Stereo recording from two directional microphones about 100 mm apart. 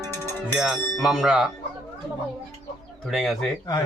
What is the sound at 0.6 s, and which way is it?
Speech, 5° right (ahead or behind).